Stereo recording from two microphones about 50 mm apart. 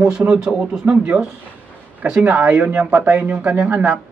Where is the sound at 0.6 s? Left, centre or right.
Centre.